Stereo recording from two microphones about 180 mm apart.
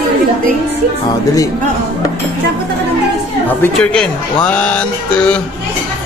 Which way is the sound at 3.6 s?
5° left (ahead or behind).